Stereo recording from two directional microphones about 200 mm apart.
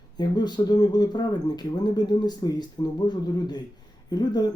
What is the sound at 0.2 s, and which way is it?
Speech, 20° left (ahead or behind).